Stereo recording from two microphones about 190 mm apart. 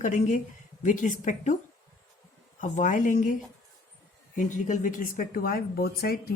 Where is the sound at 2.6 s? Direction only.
40° left (ahead or behind).